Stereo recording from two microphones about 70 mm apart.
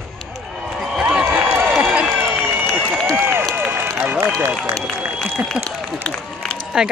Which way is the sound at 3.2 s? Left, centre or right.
Right.